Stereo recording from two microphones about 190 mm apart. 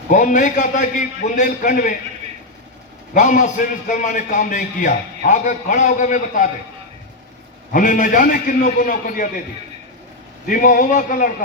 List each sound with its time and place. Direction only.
0.1 s a man's voice: 45° left (ahead or behind)
3.2 s a man's voice: 40° left (ahead or behind)
7.7 s a man's voice: 45° left (ahead or behind)
10.4 s a man's voice: 45° left (ahead or behind)